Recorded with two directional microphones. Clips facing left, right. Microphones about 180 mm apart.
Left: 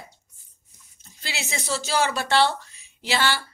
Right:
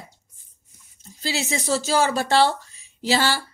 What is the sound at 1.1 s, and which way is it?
A woman's voice, 40° right (ahead or behind).